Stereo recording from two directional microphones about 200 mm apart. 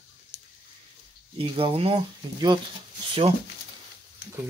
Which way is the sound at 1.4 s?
25° right (ahead or behind).